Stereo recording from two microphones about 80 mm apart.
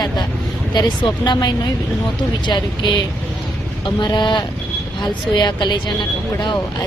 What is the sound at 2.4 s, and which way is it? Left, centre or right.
Speech, left.